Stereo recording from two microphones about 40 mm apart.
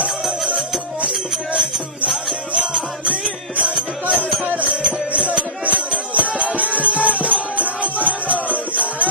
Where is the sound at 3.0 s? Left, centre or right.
Right.